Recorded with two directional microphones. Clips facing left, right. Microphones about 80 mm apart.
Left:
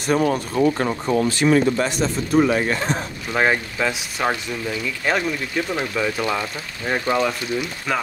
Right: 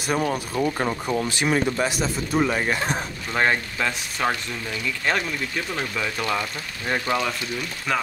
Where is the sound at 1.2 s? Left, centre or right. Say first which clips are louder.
Left 7 dB; centre.